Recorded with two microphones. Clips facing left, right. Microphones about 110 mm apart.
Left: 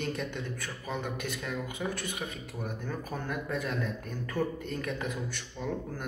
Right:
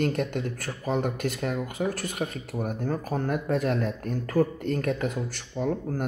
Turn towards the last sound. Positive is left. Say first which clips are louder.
# right 7 dB
turn(degrees=-50)  # may be behind; listen again after turning